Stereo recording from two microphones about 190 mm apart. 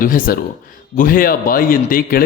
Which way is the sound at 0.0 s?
45° left (ahead or behind).